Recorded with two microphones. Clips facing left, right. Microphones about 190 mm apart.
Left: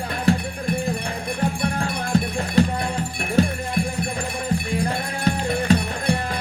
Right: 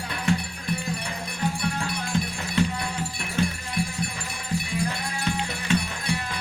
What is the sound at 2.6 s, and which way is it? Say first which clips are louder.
Music: left 5 dB; 35° left (ahead or behind).